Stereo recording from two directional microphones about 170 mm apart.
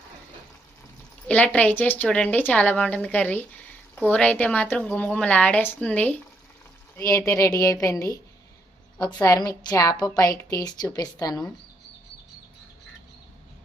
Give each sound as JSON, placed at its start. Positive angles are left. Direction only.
{"t": 1.3, "sound": "a woman's voice", "side_deg": 10}
{"t": 6.9, "sound": "a woman's voice", "side_deg": 20}
{"t": 9.2, "sound": "a woman's voice", "side_deg": 20}